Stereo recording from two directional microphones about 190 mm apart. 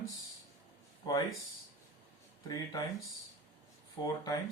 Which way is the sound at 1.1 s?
20° left (ahead or behind).